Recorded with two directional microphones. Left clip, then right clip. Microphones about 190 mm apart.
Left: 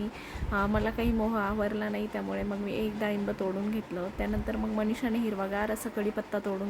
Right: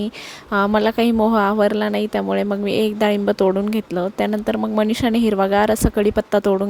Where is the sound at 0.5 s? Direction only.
45° right (ahead or behind).